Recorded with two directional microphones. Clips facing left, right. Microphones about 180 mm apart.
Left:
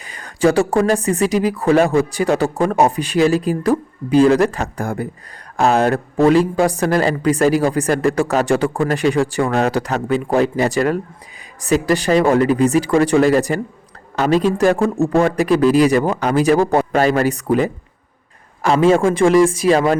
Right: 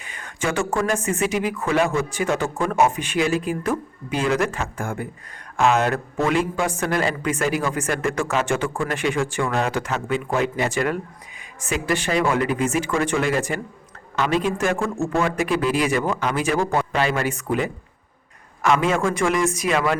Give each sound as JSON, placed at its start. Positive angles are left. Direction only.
{"t": 0.0, "sound": "a woman's voice", "side_deg": 35}